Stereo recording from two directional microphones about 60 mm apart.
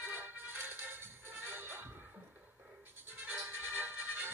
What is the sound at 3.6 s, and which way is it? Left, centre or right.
Music, right.